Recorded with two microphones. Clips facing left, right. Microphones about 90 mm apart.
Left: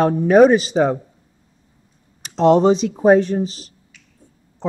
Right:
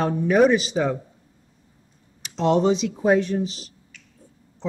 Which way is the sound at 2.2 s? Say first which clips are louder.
Left 6 dB; 40° left (ahead or behind).